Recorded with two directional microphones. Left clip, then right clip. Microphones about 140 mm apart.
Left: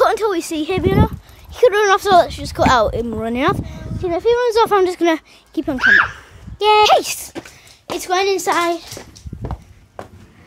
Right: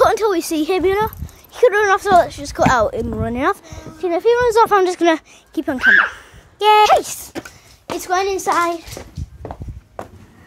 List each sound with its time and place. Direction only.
0.0 s a sound: 5° right (ahead or behind)
1.8 s a woman's voice: 30° left (ahead or behind)
2.2 s a woman's voice: 5° left (ahead or behind); by 3.5 s 30° left (ahead or behind)
3.6 s a child's voice: centre (ahead or behind)
4.6 s speech: 10° left (ahead or behind)
7.0 s a woman's voice: 30° left (ahead or behind)
8.5 s a child's voice: 35° left (ahead or behind)